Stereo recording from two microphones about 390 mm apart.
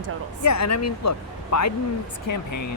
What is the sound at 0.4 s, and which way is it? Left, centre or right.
Speech, left.